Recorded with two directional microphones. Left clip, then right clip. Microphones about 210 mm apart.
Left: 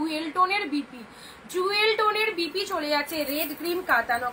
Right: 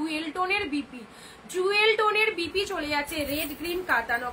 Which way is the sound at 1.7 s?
15° right (ahead or behind).